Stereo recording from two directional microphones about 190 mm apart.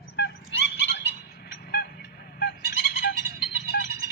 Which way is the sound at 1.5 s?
55° left (ahead or behind).